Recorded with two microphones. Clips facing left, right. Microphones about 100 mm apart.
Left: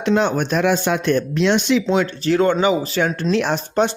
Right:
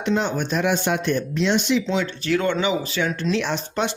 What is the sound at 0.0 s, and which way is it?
Speech, 80° left.